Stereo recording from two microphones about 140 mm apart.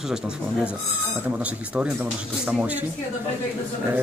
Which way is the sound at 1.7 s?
10° right (ahead or behind).